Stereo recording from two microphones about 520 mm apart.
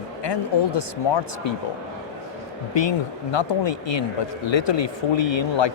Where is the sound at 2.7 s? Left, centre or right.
Left.